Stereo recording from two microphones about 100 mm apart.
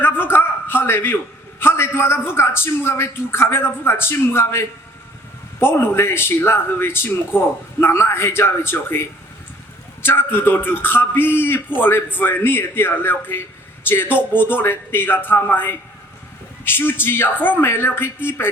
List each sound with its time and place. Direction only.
0.0 s a man's voice: 20° left (ahead or behind)